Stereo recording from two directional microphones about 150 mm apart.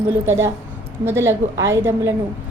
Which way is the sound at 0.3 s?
15° right (ahead or behind).